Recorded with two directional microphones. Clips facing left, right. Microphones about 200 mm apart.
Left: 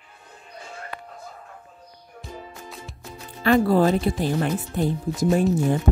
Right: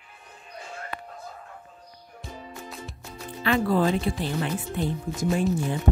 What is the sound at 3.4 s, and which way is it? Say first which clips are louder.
Speech: left 5 dB; 40° left (ahead or behind).